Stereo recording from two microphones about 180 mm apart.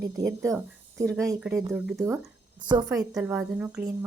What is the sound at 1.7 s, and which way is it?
Speech, centre (ahead or behind).